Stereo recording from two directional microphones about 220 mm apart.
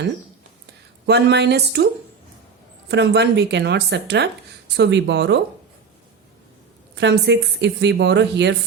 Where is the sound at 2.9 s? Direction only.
50° right (ahead or behind).